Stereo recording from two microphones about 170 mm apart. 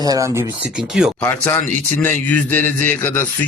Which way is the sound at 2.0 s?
10° left (ahead or behind).